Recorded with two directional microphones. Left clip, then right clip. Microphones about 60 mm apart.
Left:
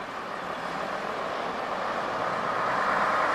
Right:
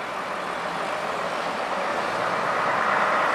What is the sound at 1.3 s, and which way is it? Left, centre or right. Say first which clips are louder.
Vehicle: right 4 dB; right.